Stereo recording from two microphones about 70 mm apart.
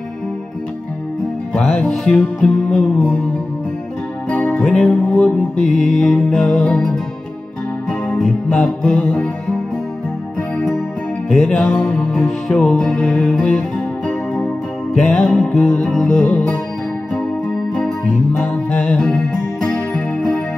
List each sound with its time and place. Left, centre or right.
1.8 s music: centre
4.3 s music: left
8.1 s music: centre
11.2 s music: centre
15.0 s music: centre
17.7 s music: centre